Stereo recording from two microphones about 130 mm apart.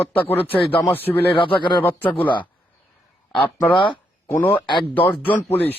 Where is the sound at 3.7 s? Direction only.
40° left (ahead or behind).